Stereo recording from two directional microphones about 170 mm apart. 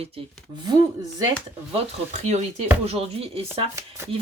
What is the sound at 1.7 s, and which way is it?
Speech, 40° right (ahead or behind).